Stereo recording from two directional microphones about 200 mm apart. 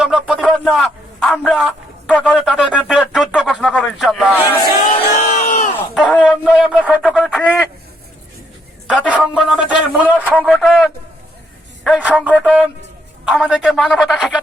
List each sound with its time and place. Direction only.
0.0 s speech: 5° right (ahead or behind)
5.1 s crowd: 35° left (ahead or behind)
5.9 s speech: centre (ahead or behind)
8.9 s speech: 5° right (ahead or behind)